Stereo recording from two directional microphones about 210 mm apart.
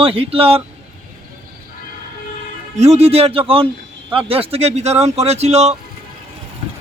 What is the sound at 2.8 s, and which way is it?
Speech, 30° right (ahead or behind).